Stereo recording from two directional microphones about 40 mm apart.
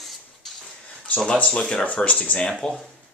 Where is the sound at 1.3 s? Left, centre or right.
Left.